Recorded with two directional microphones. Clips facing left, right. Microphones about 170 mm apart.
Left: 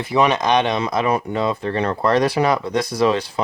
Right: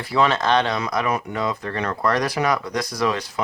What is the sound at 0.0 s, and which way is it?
Speech, 20° left (ahead or behind).